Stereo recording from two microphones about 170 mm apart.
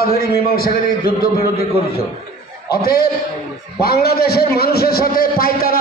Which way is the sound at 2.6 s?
65° left (ahead or behind).